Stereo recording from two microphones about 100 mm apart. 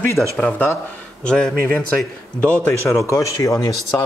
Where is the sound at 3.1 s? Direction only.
35° left (ahead or behind).